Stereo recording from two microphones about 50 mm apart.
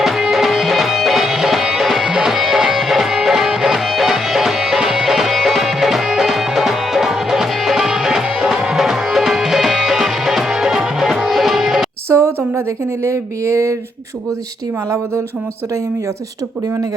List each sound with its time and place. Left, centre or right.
0.0 s music: centre
12.0 s a sound: right
12.5 s speech: right
14.8 s speech: right